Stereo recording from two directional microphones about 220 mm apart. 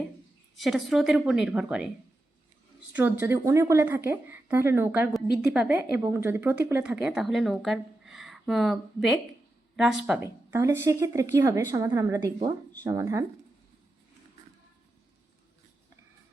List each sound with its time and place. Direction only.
0.5 s speech: centre (ahead or behind)
2.9 s a woman's voice: 10° right (ahead or behind)